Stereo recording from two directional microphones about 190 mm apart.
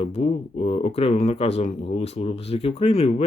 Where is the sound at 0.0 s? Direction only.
35° left (ahead or behind).